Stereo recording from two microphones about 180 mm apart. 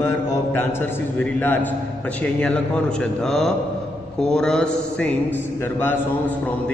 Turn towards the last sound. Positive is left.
turn(degrees=10)  # may be behind; listen again after turning